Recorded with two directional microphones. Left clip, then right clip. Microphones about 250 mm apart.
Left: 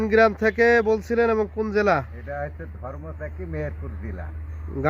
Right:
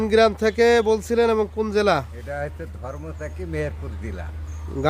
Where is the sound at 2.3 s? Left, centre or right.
Right.